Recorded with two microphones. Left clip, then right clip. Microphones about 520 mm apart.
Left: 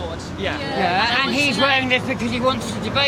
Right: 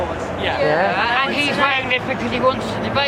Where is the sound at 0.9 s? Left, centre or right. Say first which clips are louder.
Right 1 dB; centre.